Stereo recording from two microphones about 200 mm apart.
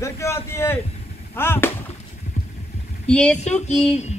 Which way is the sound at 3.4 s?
35° left (ahead or behind).